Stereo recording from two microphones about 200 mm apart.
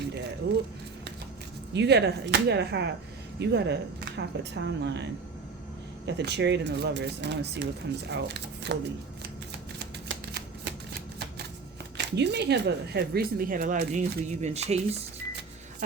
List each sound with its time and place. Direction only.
1.7 s speech: 60° right (ahead or behind)
6.1 s speech: 60° right (ahead or behind)
9.7 s shuffling cards: 60° right (ahead or behind)
11.9 s speech: 60° right (ahead or behind)
14.4 s speech: 35° right (ahead or behind)